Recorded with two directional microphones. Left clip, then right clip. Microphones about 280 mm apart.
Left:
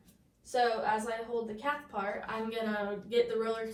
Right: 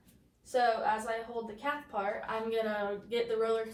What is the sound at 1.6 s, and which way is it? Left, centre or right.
Speech, centre.